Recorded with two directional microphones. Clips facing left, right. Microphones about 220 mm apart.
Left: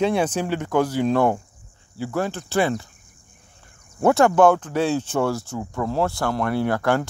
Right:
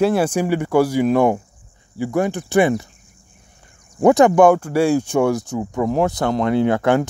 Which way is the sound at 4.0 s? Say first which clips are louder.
Right 4 dB; 15° right (ahead or behind).